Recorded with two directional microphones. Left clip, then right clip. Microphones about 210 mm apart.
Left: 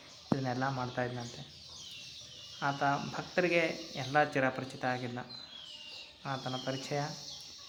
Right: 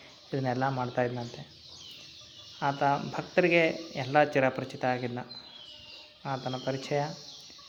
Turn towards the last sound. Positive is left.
turn(degrees=-20)  # may be behind; listen again after turning